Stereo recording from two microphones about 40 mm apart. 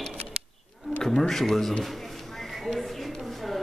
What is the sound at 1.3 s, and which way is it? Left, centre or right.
Speech, centre.